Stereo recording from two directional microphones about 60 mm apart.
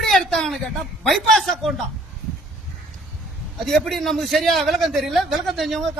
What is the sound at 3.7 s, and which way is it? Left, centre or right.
A man's voice, centre.